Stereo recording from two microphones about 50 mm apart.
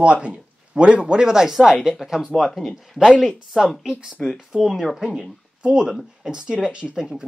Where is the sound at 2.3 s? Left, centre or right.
Centre.